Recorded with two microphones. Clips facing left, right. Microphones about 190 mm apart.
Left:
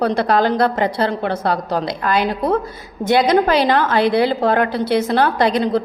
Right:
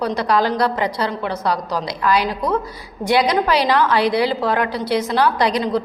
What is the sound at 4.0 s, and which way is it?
Speech, 25° left (ahead or behind).